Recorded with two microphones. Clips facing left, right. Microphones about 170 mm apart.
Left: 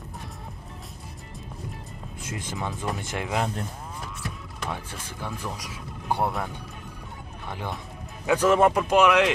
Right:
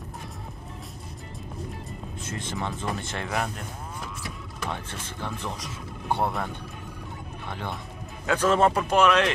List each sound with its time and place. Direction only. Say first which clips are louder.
2.2 s speech: even; 15° left (ahead or behind)
5.2 s speech: even; 10° left (ahead or behind)